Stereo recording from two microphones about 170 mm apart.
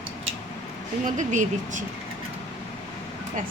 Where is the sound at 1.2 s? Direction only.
45° right (ahead or behind).